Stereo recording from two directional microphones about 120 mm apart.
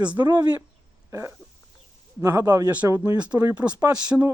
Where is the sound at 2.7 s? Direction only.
10° right (ahead or behind).